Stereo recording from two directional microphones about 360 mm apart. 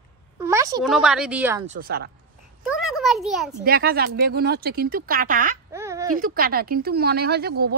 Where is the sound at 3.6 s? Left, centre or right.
Right.